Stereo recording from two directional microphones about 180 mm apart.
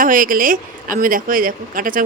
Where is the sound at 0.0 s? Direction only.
50° right (ahead or behind).